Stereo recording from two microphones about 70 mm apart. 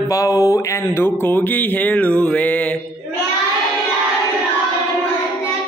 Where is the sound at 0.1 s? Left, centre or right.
Left.